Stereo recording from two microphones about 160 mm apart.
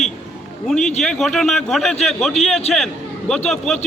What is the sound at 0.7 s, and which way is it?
A man's voice, 5° left (ahead or behind).